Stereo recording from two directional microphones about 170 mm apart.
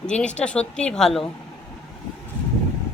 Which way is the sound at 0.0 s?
5° left (ahead or behind).